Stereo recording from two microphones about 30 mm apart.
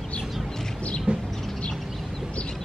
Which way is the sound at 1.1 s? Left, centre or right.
Right.